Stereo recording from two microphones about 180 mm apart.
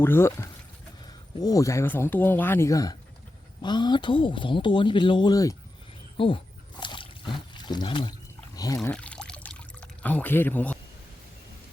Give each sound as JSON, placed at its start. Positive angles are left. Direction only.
{"t": 0.0, "sound": "speech", "side_deg": 15}
{"t": 6.1, "sound": "a sound", "side_deg": 30}
{"t": 7.5, "sound": "speech", "side_deg": 25}
{"t": 8.9, "sound": "pour", "side_deg": 5}